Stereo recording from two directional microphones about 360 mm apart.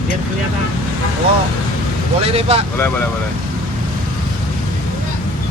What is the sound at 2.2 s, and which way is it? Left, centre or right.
Speech, centre.